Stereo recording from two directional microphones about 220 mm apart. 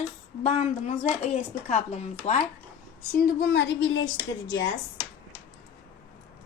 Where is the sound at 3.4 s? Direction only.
55° left (ahead or behind).